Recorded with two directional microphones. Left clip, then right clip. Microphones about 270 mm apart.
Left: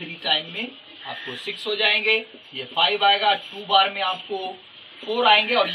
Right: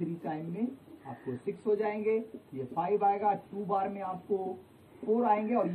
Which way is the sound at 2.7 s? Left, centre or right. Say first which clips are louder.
Left 10 dB; centre.